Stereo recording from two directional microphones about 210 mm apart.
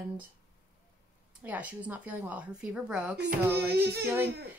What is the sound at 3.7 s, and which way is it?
Speech, 50° right (ahead or behind).